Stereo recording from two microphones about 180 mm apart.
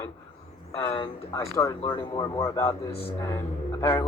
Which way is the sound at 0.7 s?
25° left (ahead or behind).